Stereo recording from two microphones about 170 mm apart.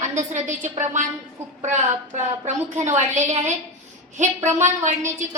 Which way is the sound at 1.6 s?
45° right (ahead or behind).